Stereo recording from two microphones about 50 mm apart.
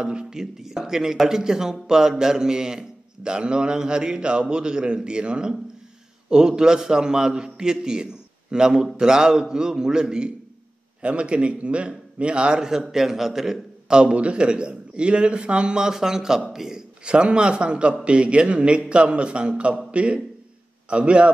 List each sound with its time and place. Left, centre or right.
0.0 s a man's voice: centre
14.1 s a man's voice: right
17.0 s a man's voice: right